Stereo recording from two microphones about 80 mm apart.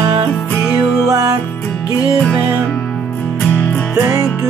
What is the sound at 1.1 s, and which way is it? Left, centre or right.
Music, right.